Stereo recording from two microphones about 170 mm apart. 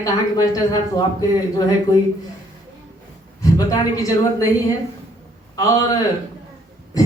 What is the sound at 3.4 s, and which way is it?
Speech, 20° left (ahead or behind).